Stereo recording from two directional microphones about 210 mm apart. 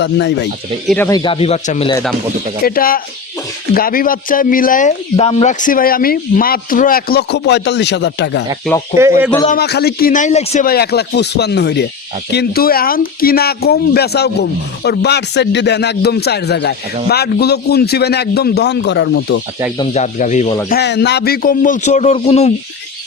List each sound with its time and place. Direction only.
0.0 s speech: 55° left (ahead or behind)
0.9 s speech: 10° left (ahead or behind); by 1.9 s 35° left (ahead or behind)
2.6 s speech: 45° left (ahead or behind)
8.9 s speech: 35° left (ahead or behind)
9.5 s speech: 50° left (ahead or behind); by 10.7 s 30° left (ahead or behind)
10.7 s speech: 50° left (ahead or behind)
19.8 s speech: 35° left (ahead or behind)
20.7 s speech: 50° left (ahead or behind); by 22.5 s 30° left (ahead or behind)